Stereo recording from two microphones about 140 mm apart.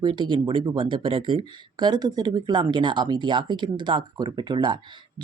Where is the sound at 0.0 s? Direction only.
35° right (ahead or behind).